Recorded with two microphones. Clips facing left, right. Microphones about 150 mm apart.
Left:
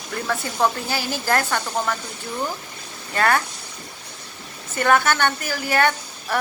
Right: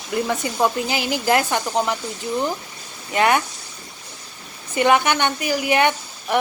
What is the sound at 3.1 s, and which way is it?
Speech, 15° right (ahead or behind).